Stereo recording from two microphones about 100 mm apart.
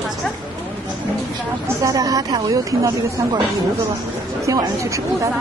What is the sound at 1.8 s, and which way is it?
Speech, 35° right (ahead or behind).